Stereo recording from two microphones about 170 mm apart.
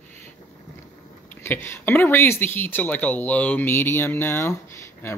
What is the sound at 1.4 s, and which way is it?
Speech, 15° left (ahead or behind).